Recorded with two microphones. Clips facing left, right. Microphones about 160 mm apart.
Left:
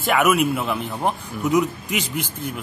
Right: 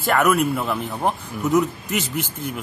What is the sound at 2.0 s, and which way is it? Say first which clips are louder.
Speech: right 1 dB; 10° left (ahead or behind).